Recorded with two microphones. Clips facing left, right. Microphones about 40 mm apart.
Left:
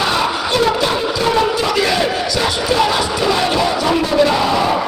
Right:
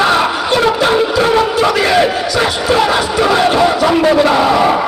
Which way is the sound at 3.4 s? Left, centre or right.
Right.